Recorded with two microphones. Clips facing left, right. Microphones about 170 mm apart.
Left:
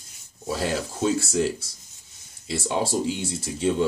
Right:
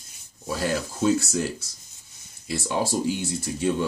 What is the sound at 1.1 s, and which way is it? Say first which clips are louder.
Speech: left 2 dB; 25° left (ahead or behind).